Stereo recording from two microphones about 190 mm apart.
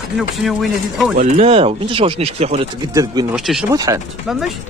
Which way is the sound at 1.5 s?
30° right (ahead or behind).